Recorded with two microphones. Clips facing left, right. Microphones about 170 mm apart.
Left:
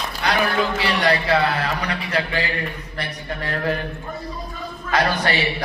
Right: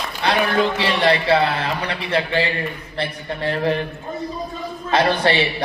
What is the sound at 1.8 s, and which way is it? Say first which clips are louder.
A man's voice: right 2 dB; 30° right (ahead or behind).